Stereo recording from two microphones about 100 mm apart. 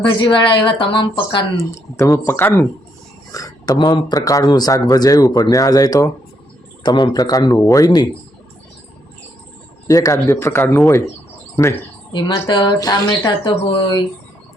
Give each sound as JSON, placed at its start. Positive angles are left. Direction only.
{"t": 0.0, "sound": "speech", "side_deg": 55}
{"t": 1.5, "sound": "speech", "side_deg": 30}
{"t": 2.2, "sound": "speech", "side_deg": 20}
{"t": 3.3, "sound": "speech", "side_deg": 40}
{"t": 9.8, "sound": "speech", "side_deg": 35}
{"t": 12.5, "sound": "speech", "side_deg": 50}